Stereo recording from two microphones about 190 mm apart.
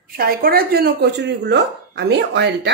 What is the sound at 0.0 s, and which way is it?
Speech, 50° right (ahead or behind).